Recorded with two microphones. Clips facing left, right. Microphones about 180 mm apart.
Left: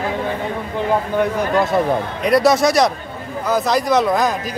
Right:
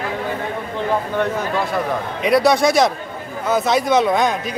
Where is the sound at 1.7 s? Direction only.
25° left (ahead or behind).